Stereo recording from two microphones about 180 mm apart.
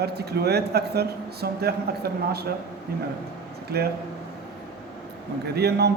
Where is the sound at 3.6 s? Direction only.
60° right (ahead or behind).